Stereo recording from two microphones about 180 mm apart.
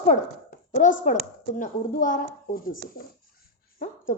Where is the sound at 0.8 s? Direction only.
45° left (ahead or behind).